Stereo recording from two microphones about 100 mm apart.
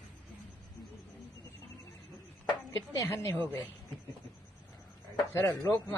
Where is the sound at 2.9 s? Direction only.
25° left (ahead or behind).